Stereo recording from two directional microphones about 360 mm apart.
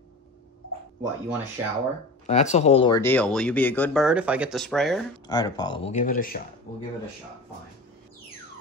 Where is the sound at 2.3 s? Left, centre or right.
Centre.